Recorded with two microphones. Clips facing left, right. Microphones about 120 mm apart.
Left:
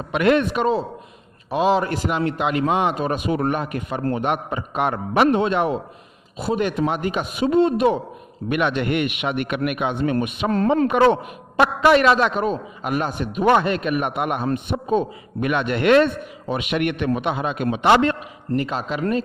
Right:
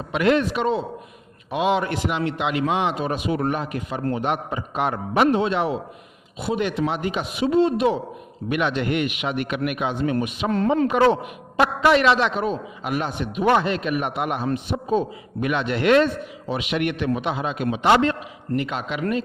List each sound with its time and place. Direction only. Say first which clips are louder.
0.1 s a man's voice: left 2 dB; 55° left (ahead or behind)
18.5 s speech: left 2 dB; 40° left (ahead or behind)